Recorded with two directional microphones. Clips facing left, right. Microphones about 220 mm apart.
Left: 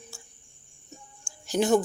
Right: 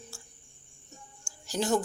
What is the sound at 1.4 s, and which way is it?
Speech, 20° left (ahead or behind).